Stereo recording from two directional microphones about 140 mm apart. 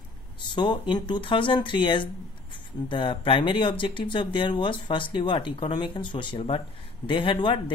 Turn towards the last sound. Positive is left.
turn(degrees=35)  # may be behind; listen again after turning